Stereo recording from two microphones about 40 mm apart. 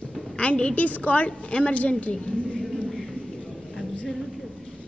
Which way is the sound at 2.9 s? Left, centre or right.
Centre.